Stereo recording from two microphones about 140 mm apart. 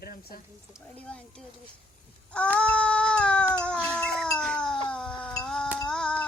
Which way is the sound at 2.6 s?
10° left (ahead or behind).